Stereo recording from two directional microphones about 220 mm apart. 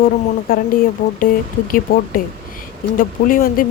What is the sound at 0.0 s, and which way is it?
Speech, 40° left (ahead or behind).